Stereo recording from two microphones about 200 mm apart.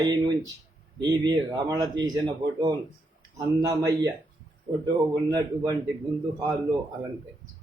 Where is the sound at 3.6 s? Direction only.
15° right (ahead or behind).